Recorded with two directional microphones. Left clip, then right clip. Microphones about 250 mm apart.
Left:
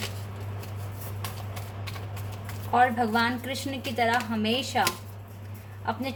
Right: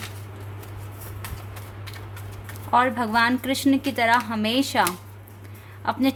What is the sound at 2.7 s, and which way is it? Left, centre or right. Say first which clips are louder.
A woman's voice: right 2 dB; right.